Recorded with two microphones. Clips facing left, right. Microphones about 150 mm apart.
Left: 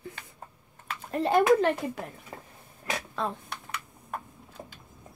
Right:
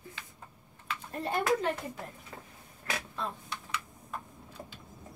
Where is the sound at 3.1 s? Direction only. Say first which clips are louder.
Left 5 dB; 80° left.